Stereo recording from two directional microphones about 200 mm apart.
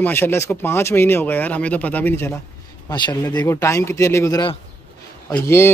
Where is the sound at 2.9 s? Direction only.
20° left (ahead or behind).